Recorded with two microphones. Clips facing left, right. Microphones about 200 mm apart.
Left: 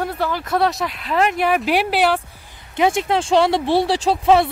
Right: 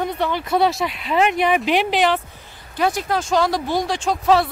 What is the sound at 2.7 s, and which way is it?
Speech, 25° left (ahead or behind).